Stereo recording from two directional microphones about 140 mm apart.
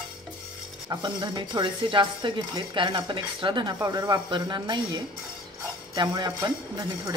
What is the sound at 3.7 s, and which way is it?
Speech, 25° right (ahead or behind).